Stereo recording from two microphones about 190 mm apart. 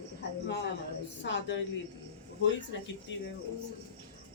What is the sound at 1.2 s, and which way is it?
Speech, 70° left (ahead or behind).